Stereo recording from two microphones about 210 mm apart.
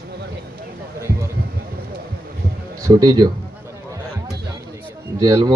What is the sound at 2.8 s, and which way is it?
Speech, 20° right (ahead or behind).